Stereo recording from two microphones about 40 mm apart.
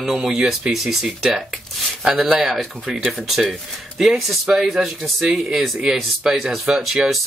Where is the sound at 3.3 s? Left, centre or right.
Centre.